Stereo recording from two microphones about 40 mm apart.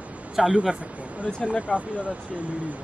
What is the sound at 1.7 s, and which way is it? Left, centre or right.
Speech, right.